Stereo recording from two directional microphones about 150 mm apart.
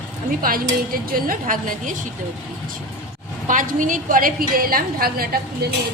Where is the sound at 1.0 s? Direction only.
70° right (ahead or behind).